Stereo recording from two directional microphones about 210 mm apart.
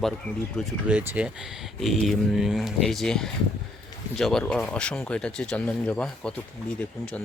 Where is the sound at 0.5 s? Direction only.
5° right (ahead or behind).